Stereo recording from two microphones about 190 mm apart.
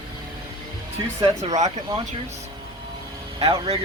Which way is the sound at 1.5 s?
35° right (ahead or behind).